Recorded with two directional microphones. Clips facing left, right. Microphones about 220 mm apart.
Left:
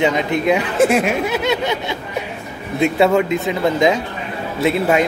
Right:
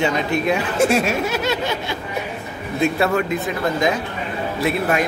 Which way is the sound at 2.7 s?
20° left (ahead or behind).